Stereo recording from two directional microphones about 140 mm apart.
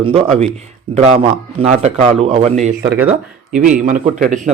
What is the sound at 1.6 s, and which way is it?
Speech, 55° right (ahead or behind).